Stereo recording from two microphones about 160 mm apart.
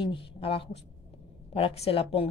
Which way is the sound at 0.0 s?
35° left (ahead or behind).